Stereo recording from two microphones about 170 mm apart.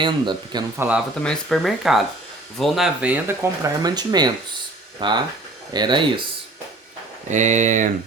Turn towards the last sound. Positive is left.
turn(degrees=-45)  # may be behind; listen again after turning